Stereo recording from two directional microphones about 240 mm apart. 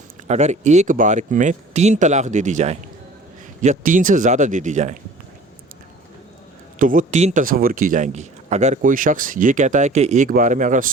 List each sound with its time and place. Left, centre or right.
0.3 s speech: right
6.7 s speech: right